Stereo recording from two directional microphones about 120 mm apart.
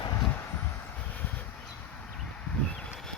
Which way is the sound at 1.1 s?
15° left (ahead or behind).